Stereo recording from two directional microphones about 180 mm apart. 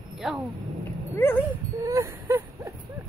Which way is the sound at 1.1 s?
10° left (ahead or behind).